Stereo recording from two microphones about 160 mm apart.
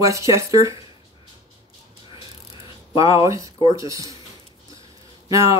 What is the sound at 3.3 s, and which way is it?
Speech, 20° right (ahead or behind).